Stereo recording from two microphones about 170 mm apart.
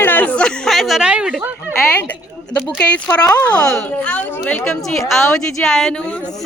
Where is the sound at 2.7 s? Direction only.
5° left (ahead or behind).